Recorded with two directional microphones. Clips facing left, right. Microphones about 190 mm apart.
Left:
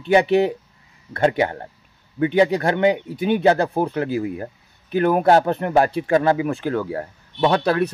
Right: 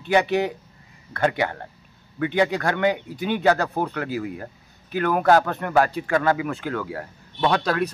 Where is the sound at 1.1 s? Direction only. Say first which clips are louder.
Left 4 dB; 30° left (ahead or behind).